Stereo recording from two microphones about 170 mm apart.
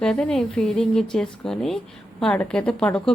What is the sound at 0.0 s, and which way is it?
A woman's voice, 5° left (ahead or behind).